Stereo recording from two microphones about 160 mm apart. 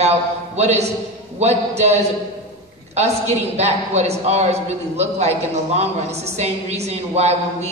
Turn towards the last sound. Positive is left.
turn(degrees=-45)  # may be behind; listen again after turning